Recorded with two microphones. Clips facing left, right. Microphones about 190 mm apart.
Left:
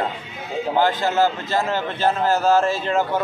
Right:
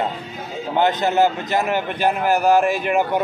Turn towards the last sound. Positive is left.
turn(degrees=-15)  # may be behind; listen again after turning